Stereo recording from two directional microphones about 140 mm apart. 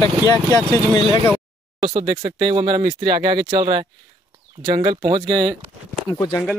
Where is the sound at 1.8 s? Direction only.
35° right (ahead or behind).